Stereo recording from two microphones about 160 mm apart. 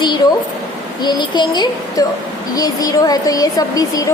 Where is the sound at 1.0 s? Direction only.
25° left (ahead or behind).